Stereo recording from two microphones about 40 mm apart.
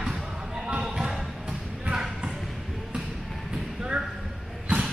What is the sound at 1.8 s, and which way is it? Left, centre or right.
Basketball bounce, centre.